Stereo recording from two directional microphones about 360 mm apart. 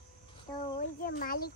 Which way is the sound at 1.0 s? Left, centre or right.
Left.